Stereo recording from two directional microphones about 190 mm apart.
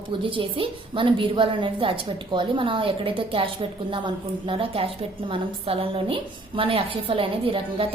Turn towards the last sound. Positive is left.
turn(degrees=-30)  # may be behind; listen again after turning